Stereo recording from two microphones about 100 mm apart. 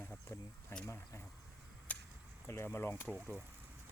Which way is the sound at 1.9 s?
15° left (ahead or behind).